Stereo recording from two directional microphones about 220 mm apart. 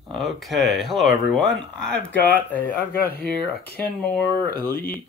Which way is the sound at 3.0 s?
45° left (ahead or behind).